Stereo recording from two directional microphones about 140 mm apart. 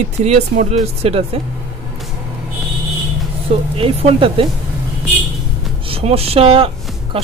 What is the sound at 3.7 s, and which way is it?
Speech, 40° right (ahead or behind).